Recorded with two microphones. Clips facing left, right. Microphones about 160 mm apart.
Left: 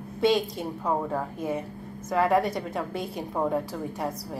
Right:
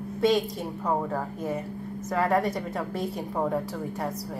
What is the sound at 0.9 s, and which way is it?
A woman's voice, centre (ahead or behind).